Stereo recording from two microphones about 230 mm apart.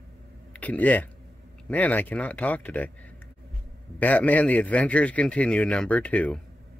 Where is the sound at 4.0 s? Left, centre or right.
Centre.